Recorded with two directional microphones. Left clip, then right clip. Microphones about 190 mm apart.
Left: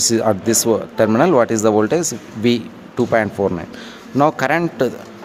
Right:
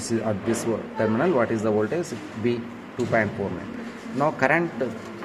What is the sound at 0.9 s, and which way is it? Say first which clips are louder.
Speech: left 8 dB; 60° left (ahead or behind).